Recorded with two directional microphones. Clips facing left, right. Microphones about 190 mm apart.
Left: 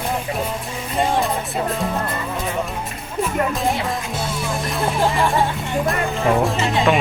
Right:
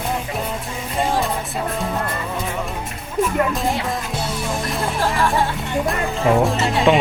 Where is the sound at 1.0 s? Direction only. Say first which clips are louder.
Left 1 dB; centre (ahead or behind).